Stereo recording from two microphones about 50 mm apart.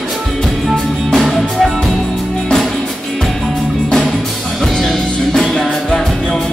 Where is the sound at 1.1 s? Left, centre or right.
Centre.